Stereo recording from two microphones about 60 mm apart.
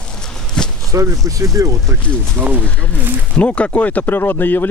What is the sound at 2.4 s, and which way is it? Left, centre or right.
Speech, right.